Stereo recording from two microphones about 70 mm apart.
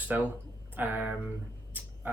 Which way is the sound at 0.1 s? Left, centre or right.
Right.